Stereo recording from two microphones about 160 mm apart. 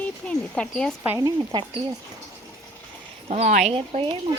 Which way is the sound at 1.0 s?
20° right (ahead or behind).